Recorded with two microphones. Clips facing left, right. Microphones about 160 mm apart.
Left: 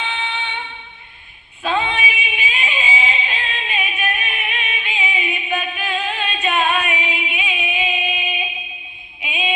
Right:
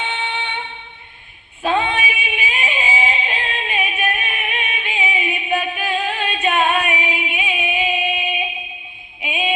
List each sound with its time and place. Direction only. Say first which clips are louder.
0.0 s music: right 1 dB; 40° right (ahead or behind)
1.6 s female singing: right 2 dB; 50° right (ahead or behind)
7.6 s music: right 4 dB; 45° right (ahead or behind)
9.2 s child singing: right 3 dB; 45° right (ahead or behind)